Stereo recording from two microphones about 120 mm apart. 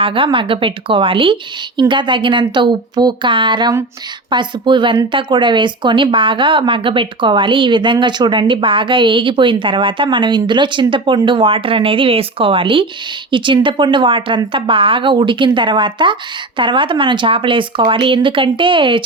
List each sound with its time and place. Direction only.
0.0 s speech: 45° right (ahead or behind)